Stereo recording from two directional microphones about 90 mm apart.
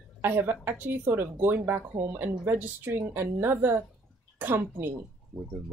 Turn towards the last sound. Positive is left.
turn(degrees=-20)  # may be behind; listen again after turning